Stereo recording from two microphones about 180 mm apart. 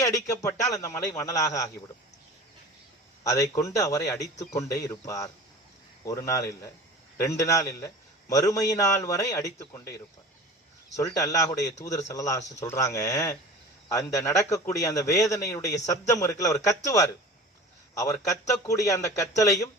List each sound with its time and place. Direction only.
0.0 s a man's voice: 15° left (ahead or behind)
3.2 s a man's voice: 15° left (ahead or behind)